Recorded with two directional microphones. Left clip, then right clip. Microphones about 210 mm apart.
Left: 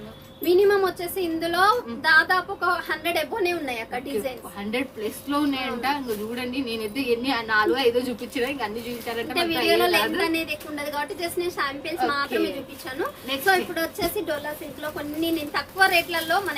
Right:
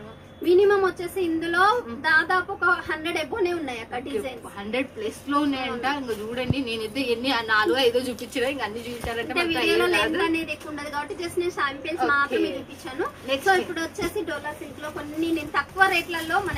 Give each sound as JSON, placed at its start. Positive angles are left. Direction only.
{"t": 0.4, "sound": "a woman's voice", "side_deg": 0}
{"t": 5.3, "sound": "a woman's voice", "side_deg": 15}
{"t": 9.3, "sound": "a woman's voice", "side_deg": 0}
{"t": 11.9, "sound": "a woman's voice", "side_deg": 15}
{"t": 13.5, "sound": "a woman's voice", "side_deg": 0}